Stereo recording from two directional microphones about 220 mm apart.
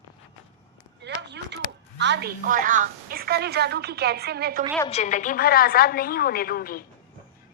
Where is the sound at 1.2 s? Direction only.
50° right (ahead or behind).